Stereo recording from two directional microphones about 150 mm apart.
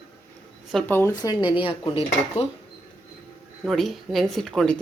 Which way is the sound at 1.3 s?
35° left (ahead or behind).